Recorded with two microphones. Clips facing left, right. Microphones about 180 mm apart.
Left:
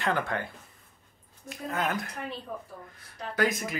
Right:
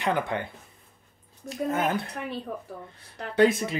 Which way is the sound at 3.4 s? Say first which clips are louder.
Right 7 dB; 30° right (ahead or behind).